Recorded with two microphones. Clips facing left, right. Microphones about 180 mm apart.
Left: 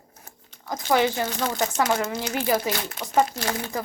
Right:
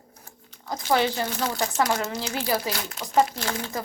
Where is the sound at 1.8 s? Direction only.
5° left (ahead or behind).